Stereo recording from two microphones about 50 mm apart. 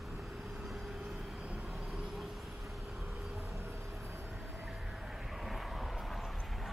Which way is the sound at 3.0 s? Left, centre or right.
Centre.